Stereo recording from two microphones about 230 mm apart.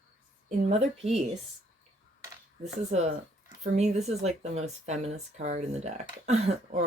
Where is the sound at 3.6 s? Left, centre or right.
Right.